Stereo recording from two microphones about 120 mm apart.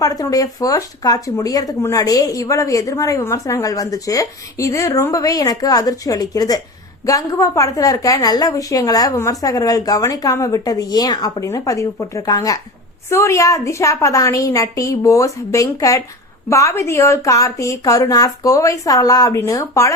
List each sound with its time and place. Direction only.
0.0 s speech: 30° left (ahead or behind)